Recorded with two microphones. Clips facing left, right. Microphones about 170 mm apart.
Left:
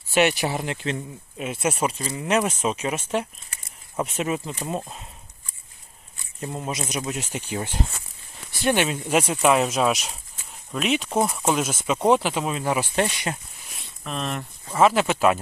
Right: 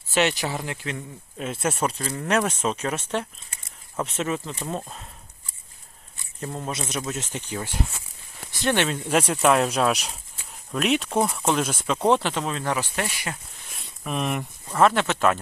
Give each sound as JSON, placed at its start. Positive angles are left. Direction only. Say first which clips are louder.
{"t": 0.1, "sound": "speech", "louder": "left 3 dB", "side_deg": 15}
{"t": 1.6, "sound": "speech", "louder": "left 1 dB", "side_deg": 5}
{"t": 6.4, "sound": "speech", "louder": "left 1 dB", "side_deg": 10}
{"t": 8.6, "sound": "speech", "louder": "left 1 dB", "side_deg": 10}
{"t": 13.0, "sound": "speech", "louder": "left 5 dB", "side_deg": 25}
{"t": 14.0, "sound": "speech", "louder": "right 2 dB", "side_deg": -10}
{"t": 14.7, "sound": "speech", "louder": "left 1 dB", "side_deg": 5}